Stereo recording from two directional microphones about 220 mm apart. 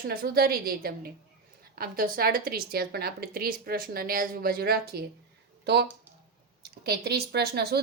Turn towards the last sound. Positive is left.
turn(degrees=-45)  # may be behind; listen again after turning